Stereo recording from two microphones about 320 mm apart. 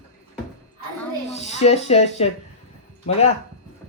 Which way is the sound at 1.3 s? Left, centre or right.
Left.